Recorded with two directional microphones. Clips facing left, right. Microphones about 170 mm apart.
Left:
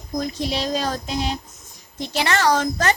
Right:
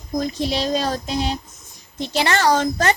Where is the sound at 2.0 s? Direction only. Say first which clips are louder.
Right 2 dB; 30° right (ahead or behind).